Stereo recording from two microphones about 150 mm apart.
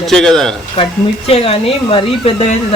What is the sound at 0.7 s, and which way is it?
Speech, 40° left (ahead or behind).